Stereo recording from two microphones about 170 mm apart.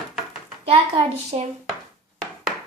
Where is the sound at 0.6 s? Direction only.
35° right (ahead or behind).